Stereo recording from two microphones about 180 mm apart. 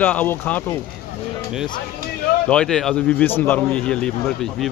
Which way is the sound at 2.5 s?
5° left (ahead or behind).